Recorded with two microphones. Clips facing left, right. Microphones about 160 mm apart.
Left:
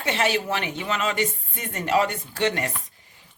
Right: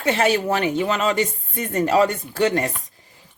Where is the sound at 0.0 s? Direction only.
40° right (ahead or behind).